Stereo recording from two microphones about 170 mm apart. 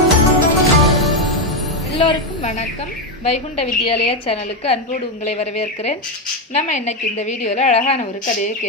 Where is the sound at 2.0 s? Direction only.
35° left (ahead or behind).